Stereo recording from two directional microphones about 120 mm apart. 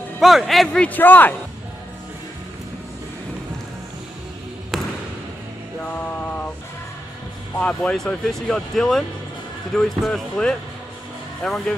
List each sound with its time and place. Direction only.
0.2 s speech: centre (ahead or behind)
0.8 s a man's voice: 15° left (ahead or behind)
5.9 s music: 15° left (ahead or behind)
7.5 s speech: 10° left (ahead or behind)